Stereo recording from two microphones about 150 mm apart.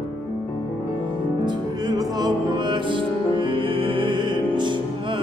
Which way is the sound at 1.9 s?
25° right (ahead or behind).